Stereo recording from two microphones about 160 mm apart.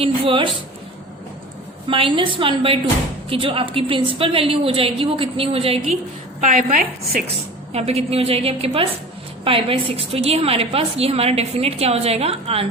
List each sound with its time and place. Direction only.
0.0 s a woman's voice: 30° right (ahead or behind)
1.9 s a woman's voice: 35° right (ahead or behind); by 7.2 s 60° right (ahead or behind)
7.7 s a woman's voice: 40° right (ahead or behind)